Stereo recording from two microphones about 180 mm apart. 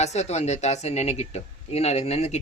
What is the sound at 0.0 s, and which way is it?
Speech, 40° left (ahead or behind).